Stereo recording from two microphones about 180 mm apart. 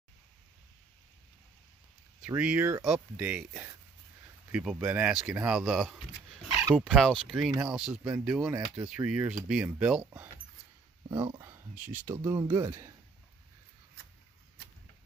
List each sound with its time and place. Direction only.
2.2 s speech: 5° right (ahead or behind)
11.1 s speech: 20° right (ahead or behind)